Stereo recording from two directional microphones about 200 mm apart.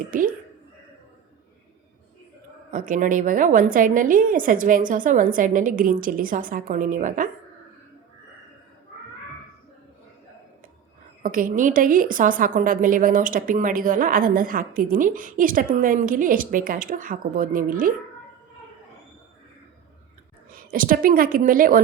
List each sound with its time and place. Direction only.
2.7 s a woman's voice: 40° right (ahead or behind)
11.2 s a woman's voice: 45° right (ahead or behind)
20.5 s a woman's voice: 45° right (ahead or behind)